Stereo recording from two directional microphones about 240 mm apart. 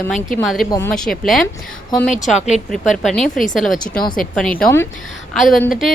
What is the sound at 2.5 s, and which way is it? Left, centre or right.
A woman's voice, centre.